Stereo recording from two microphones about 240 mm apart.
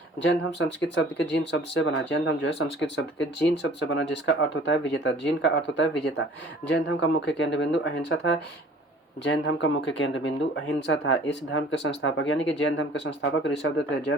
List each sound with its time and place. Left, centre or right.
0.2 s speech: left